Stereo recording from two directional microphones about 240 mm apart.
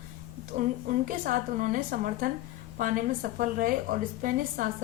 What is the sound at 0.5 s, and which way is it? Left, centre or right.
A woman's voice, right.